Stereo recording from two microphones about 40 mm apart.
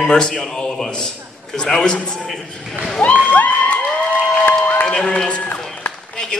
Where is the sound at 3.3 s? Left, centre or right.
Left.